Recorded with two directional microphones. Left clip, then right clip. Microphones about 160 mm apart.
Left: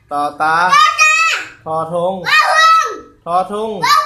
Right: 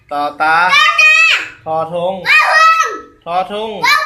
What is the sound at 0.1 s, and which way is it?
Speech, 10° left (ahead or behind).